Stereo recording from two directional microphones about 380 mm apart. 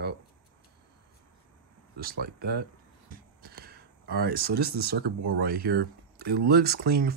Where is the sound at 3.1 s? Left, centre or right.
Right.